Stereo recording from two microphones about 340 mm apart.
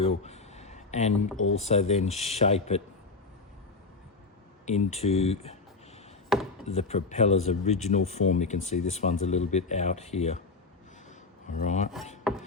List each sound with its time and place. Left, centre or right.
0.2 s a sound: centre
1.5 s speech: centre
4.6 s speech: centre
6.3 s chopping: centre
6.7 s speech: centre
11.4 s speech: left